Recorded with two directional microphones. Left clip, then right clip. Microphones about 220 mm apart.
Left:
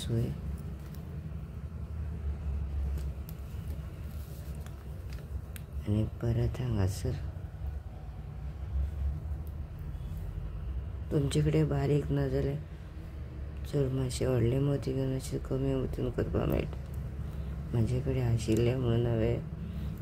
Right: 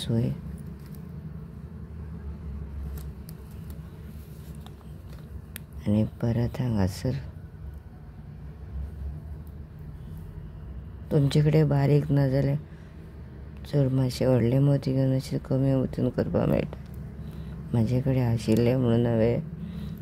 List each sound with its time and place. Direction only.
5.9 s speech: 30° right (ahead or behind)
11.1 s speech: 30° right (ahead or behind)
13.7 s speech: 30° right (ahead or behind)
17.7 s speech: 30° right (ahead or behind)